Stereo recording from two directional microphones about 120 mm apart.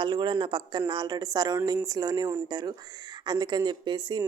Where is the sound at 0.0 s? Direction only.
40° right (ahead or behind).